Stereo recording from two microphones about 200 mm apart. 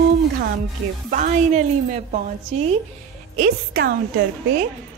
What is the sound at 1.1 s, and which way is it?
Speech, 40° right (ahead or behind).